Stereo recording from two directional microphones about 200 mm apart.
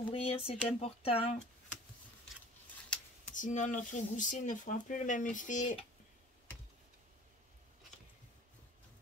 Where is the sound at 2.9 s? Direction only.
5° left (ahead or behind).